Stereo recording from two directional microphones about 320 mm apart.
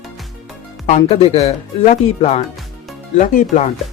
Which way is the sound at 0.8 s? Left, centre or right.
Centre.